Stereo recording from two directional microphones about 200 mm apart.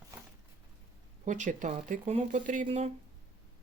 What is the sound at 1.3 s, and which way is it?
Speech, 40° right (ahead or behind).